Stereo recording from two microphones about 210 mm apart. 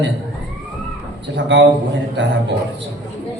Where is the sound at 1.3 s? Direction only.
60° right (ahead or behind).